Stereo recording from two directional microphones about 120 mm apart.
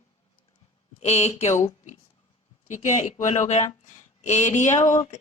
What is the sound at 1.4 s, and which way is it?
Speech, 80° left.